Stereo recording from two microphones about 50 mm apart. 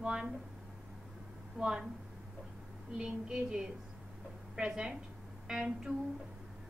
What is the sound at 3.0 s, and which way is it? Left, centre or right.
A woman's voice, centre.